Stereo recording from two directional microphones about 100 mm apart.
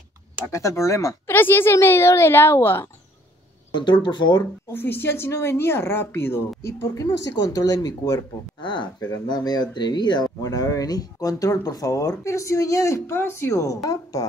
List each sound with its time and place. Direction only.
0.5 s speech: 30° left (ahead or behind)
1.3 s speech: 20° left (ahead or behind)
3.7 s speech: 50° left (ahead or behind)
4.6 s speech: 20° left (ahead or behind)
8.5 s speech: 50° left (ahead or behind)
9.1 s speech: 40° left (ahead or behind)
10.4 s speech: 35° left (ahead or behind)